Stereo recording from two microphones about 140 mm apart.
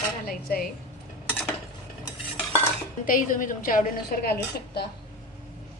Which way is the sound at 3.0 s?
75° left (ahead or behind).